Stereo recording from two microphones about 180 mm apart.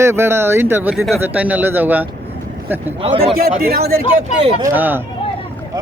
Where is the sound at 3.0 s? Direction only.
30° right (ahead or behind).